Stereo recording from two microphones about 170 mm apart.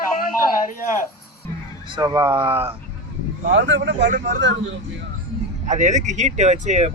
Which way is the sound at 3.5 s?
90° right.